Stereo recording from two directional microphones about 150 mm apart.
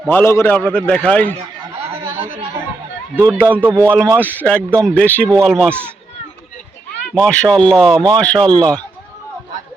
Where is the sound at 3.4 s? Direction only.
15° right (ahead or behind).